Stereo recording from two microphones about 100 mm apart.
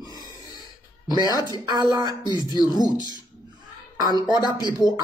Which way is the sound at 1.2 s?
40° left (ahead or behind).